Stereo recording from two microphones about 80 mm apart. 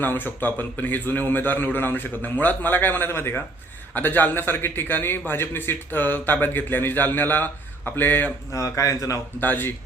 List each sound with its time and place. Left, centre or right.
0.0 s a man's voice: left
8.5 s a man's voice: left
9.4 s a man's voice: left